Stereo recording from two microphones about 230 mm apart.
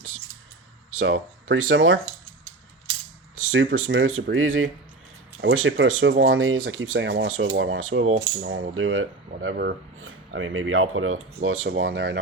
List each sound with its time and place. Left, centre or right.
0.9 s speech: right
3.3 s speech: right
8.1 s coin: right
8.7 s speech: right